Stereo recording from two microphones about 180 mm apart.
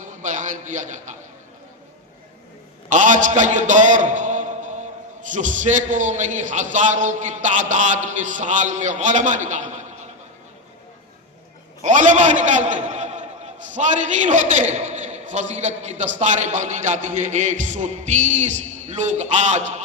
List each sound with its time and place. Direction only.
0.0 s a sound: 45° right (ahead or behind)
2.9 s a man's voice: 45° right (ahead or behind)
11.8 s a man's voice: 45° right (ahead or behind)